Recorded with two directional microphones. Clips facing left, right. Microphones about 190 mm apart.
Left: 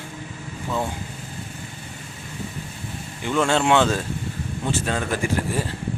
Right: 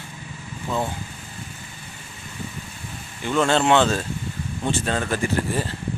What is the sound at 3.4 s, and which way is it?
Speech, 10° left (ahead or behind).